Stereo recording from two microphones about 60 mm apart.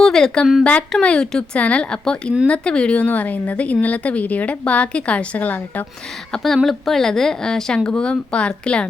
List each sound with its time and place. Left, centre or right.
0.0 s speech: centre; by 5.8 s left
6.3 s speech: centre